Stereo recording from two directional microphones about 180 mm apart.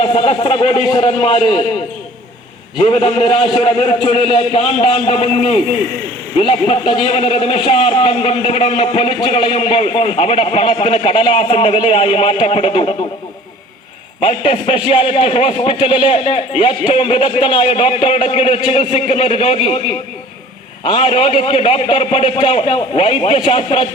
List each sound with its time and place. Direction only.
0.0 s a man's voice: 30° left (ahead or behind)
2.8 s a man's voice: 30° left (ahead or behind)
14.2 s a man's voice: 30° left (ahead or behind)